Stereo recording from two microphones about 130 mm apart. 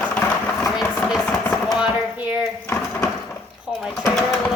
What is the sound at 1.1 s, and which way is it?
Chopping, 10° left (ahead or behind).